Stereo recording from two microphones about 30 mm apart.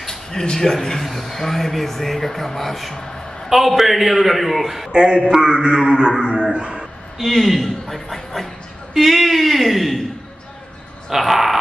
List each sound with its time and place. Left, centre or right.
0.0 s a sound: centre
1.0 s a man's voice: centre
2.9 s a sound: left
3.4 s a man's voice: centre
4.9 s a sound: right
6.5 s speech: right
7.2 s speech: centre
8.9 s a man's voice: centre
11.1 s a man's voice: centre